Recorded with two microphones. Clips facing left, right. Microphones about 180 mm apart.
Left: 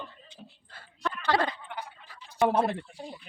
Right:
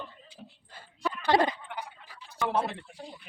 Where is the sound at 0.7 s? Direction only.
15° right (ahead or behind).